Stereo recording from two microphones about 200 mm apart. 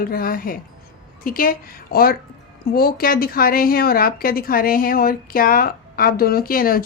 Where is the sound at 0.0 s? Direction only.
45° left (ahead or behind).